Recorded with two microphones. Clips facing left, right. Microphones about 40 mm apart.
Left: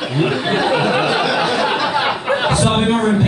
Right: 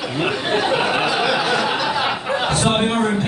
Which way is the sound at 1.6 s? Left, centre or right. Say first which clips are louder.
Left 3 dB; left.